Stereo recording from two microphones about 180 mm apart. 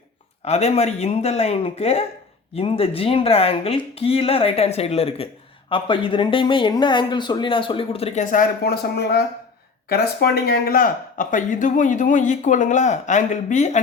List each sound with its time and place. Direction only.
0.4 s speech: 35° left (ahead or behind)